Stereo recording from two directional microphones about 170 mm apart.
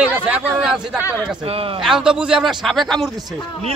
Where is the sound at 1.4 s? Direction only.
35° right (ahead or behind).